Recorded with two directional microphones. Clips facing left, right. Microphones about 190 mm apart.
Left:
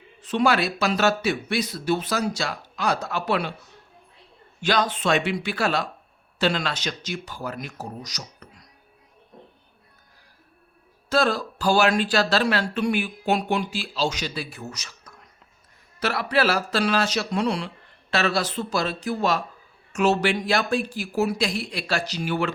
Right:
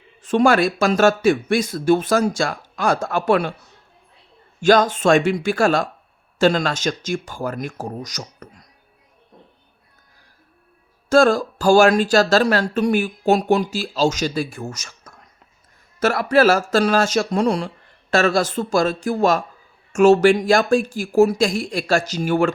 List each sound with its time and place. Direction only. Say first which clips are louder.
0.2 s speech: right 6 dB; 50° right (ahead or behind)
4.6 s speech: right 8 dB; 45° right (ahead or behind)
11.1 s speech: right 8 dB; 45° right (ahead or behind)